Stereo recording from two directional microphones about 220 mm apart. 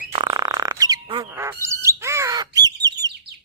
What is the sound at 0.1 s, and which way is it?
Bird, 20° right (ahead or behind).